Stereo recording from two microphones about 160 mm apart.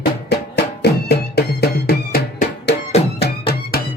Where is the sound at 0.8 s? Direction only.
90° left.